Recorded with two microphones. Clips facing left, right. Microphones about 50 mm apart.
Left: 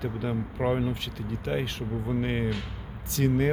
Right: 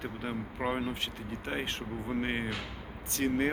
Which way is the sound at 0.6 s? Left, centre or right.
Centre.